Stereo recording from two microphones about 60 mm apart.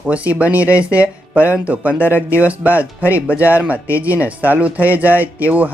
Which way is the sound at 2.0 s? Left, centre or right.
Left.